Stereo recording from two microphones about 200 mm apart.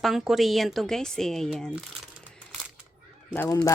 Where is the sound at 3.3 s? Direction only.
10° left (ahead or behind).